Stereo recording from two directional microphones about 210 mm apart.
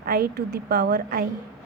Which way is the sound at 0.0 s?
45° right (ahead or behind).